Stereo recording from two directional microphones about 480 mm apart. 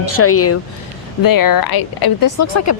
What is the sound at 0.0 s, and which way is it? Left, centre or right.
Speech, left.